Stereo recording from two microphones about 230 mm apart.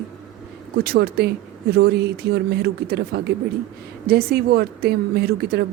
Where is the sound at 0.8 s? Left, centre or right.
Right.